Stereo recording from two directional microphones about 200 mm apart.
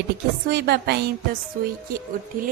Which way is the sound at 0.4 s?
50° right (ahead or behind).